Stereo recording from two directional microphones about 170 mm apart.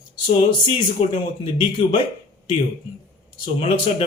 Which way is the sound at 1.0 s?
30° left (ahead or behind).